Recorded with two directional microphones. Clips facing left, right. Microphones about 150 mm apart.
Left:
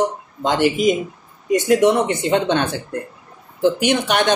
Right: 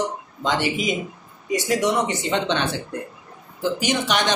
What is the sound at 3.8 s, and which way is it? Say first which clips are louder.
Speech: left 4 dB; 55° left (ahead or behind).